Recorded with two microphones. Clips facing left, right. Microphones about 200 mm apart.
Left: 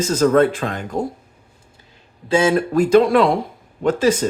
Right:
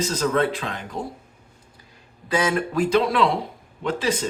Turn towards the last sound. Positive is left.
turn(degrees=45)  # may be behind; listen again after turning